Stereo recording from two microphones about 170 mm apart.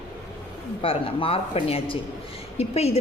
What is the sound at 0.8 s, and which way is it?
A woman's voice, 35° left (ahead or behind).